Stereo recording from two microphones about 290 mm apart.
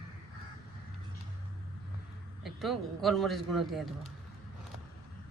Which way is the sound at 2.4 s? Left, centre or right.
Centre.